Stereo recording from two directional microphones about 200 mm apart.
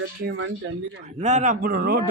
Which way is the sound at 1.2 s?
35° right (ahead or behind).